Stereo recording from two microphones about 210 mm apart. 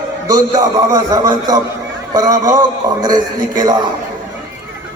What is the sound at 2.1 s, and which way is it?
A man's voice, 15° right (ahead or behind).